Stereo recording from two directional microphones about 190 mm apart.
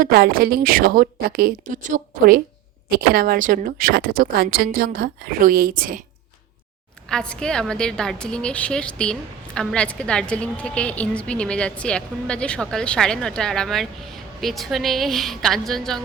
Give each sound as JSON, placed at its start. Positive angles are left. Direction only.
{"t": 0.0, "sound": "speech", "side_deg": -55}
{"t": 7.1, "sound": "a woman's voice", "side_deg": 5}